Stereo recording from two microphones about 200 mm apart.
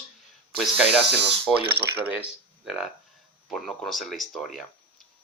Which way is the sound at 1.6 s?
50° right (ahead or behind).